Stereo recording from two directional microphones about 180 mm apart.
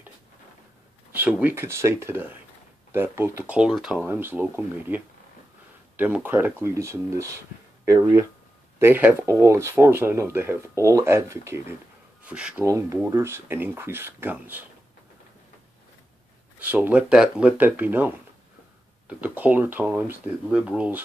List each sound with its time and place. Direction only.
1.1 s speech: 10° right (ahead or behind)
12.6 s speech: 15° right (ahead or behind)
16.5 s speech: 10° right (ahead or behind)